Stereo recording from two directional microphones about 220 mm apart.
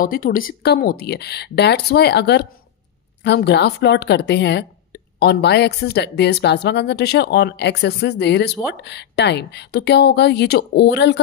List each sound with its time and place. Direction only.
0.0 s a woman's voice: 40° left (ahead or behind)